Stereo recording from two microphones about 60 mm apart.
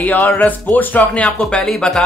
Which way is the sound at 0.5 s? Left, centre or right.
Left.